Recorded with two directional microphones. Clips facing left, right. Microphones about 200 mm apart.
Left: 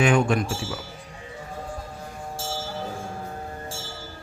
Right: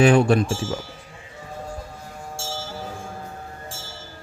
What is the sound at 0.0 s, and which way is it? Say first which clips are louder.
Speech: right 5 dB; 35° right (ahead or behind).